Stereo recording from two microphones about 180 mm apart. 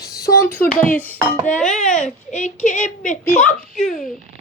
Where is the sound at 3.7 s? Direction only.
5° left (ahead or behind).